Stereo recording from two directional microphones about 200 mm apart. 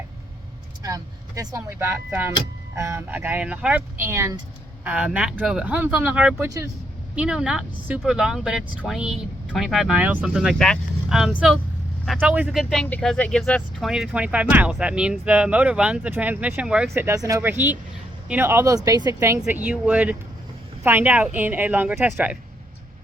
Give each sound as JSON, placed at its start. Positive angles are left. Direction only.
{"t": 0.8, "sound": "speech", "side_deg": -15}